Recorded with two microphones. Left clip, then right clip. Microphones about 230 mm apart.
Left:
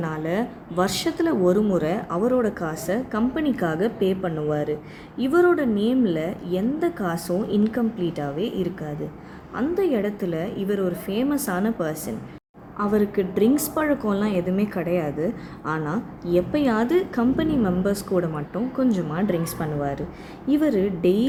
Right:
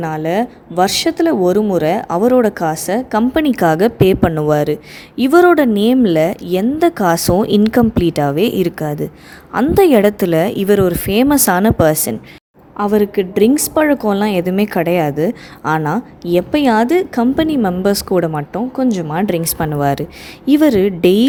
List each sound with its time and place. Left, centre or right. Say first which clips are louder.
0.0 s a woman's voice: right 9 dB; right
12.7 s a woman's voice: right 8 dB; right